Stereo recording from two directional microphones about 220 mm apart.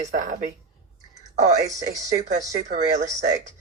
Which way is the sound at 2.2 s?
35° right (ahead or behind).